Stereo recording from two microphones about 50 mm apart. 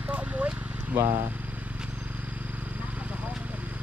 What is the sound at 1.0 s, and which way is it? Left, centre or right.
Speech, right.